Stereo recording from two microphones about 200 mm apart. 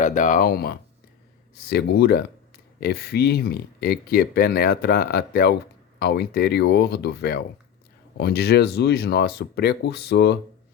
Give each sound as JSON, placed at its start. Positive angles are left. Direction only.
{"t": 0.0, "sound": "speech", "side_deg": 40}